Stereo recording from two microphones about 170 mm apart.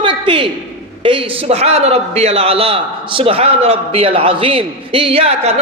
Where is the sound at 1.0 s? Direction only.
35° right (ahead or behind).